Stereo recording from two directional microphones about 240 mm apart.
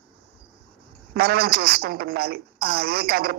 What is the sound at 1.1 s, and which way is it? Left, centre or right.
A woman's voice, right.